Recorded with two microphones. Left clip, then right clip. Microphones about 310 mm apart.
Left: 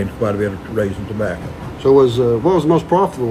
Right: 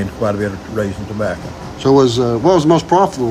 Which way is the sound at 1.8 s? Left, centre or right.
Right.